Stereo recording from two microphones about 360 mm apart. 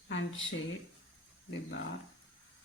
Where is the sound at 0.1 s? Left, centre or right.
Left.